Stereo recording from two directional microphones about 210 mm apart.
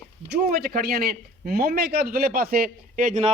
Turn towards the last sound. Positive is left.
turn(degrees=-35)  # may be behind; listen again after turning